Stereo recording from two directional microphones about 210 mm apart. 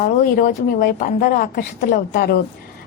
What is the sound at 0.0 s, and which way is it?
A woman's voice, 40° left (ahead or behind).